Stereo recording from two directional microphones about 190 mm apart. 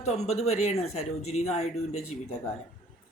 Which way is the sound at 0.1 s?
35° left (ahead or behind).